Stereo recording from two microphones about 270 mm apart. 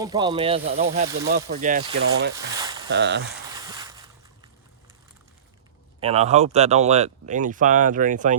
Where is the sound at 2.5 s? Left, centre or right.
Centre.